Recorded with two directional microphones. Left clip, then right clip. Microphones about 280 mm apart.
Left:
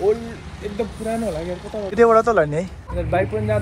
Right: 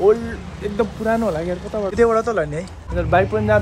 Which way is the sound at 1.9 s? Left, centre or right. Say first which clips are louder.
Left 3 dB; centre.